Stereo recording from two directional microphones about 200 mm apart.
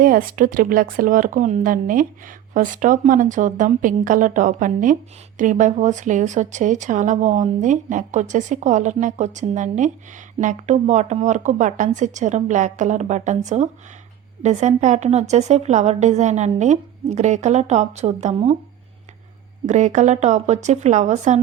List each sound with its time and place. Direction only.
0.0 s speech: 45° right (ahead or behind)
19.6 s speech: 35° right (ahead or behind)